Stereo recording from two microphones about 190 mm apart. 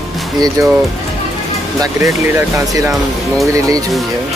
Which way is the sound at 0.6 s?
15° right (ahead or behind).